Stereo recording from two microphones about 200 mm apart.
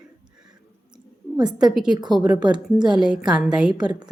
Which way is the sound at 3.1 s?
5° right (ahead or behind).